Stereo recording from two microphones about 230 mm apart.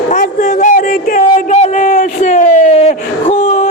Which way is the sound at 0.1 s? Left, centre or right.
Left.